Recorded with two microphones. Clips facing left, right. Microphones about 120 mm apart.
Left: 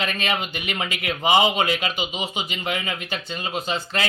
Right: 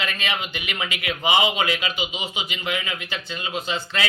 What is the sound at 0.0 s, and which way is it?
Speech, 35° left (ahead or behind).